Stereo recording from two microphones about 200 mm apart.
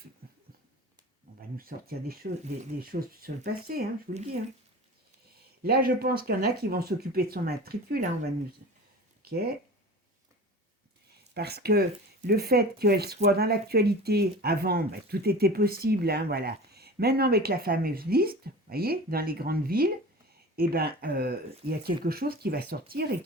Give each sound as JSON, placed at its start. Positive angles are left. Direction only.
{"t": 1.4, "sound": "speech", "side_deg": -45}
{"t": 5.6, "sound": "speech", "side_deg": -50}
{"t": 9.2, "sound": "speech", "side_deg": -50}
{"t": 11.3, "sound": "speech", "side_deg": -50}